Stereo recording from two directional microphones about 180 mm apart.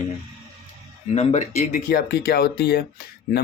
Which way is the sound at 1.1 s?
40° left (ahead or behind).